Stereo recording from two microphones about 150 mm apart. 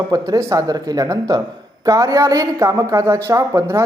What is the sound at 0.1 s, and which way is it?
A man's voice, 20° right (ahead or behind).